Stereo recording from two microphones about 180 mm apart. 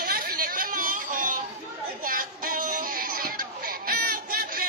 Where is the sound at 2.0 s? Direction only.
50° right (ahead or behind).